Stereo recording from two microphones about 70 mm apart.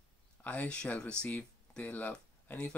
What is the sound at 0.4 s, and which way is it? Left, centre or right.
Speech, left.